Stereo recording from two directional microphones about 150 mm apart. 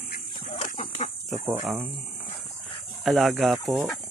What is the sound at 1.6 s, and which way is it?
Speech, 15° right (ahead or behind).